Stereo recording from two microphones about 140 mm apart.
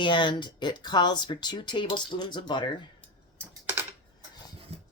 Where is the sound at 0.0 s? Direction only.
35° left (ahead or behind).